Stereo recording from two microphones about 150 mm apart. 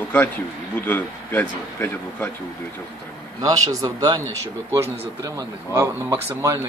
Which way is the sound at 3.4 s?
25° right (ahead or behind).